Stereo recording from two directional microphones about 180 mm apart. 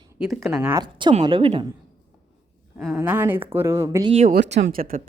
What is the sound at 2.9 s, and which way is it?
A woman's voice, 10° right (ahead or behind).